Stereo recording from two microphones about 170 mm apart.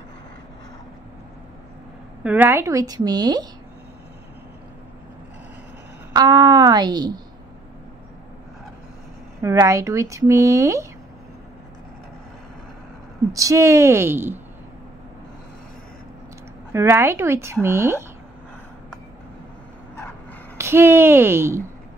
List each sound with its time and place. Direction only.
2.2 s speech: 15° right (ahead or behind)
6.1 s a woman's voice: 25° right (ahead or behind)
9.4 s speech: 20° right (ahead or behind)
13.3 s speech: 20° right (ahead or behind)
16.7 s speech: 15° right (ahead or behind)
20.5 s speech: 15° right (ahead or behind)